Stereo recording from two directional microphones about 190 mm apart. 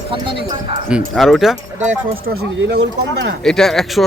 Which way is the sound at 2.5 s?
65° right (ahead or behind).